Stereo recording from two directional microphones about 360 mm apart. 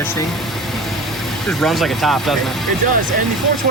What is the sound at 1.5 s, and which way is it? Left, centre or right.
Speech, centre.